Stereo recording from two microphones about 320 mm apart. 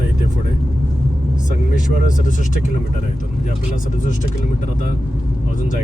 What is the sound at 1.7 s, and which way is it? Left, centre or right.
Speech, left.